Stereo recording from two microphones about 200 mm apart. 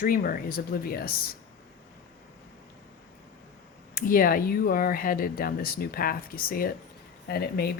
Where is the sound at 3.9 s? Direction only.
45° left (ahead or behind).